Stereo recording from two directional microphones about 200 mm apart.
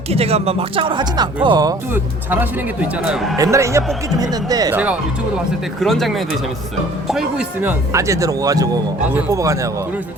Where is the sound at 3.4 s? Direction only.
15° right (ahead or behind).